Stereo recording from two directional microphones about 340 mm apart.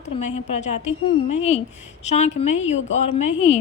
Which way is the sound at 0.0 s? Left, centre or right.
Centre.